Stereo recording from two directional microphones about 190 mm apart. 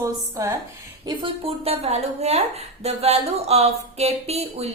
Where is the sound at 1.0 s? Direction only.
25° right (ahead or behind).